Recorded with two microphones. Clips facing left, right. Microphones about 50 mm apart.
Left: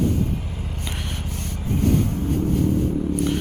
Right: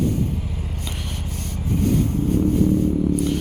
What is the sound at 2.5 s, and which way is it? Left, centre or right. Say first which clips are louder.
Vehicle: right 2 dB; left.